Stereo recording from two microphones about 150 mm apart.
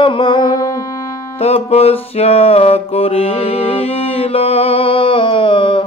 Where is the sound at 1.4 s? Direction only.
45° left (ahead or behind).